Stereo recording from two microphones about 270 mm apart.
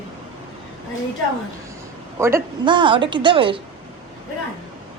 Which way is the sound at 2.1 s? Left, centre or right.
Centre.